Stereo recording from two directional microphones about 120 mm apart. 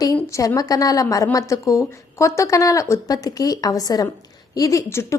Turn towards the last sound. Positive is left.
turn(degrees=25)  # may be behind; listen again after turning